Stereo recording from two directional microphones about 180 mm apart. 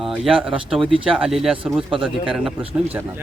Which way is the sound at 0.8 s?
30° right (ahead or behind).